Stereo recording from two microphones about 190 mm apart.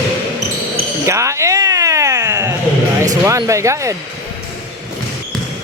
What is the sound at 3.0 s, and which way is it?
Speech, 15° right (ahead or behind).